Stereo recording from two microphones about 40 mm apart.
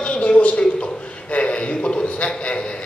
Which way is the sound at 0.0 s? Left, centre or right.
Left.